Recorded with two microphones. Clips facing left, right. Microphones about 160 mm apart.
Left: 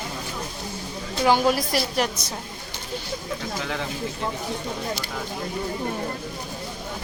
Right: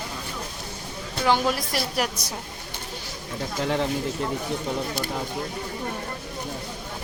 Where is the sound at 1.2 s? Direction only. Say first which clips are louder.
Left 3 dB; 5° left (ahead or behind).